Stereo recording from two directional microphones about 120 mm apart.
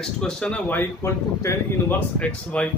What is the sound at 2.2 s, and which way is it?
Speech, 10° left (ahead or behind).